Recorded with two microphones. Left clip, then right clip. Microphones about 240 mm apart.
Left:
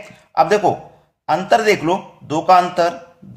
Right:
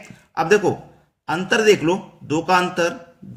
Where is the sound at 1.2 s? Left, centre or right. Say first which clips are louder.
Left 2 dB; centre.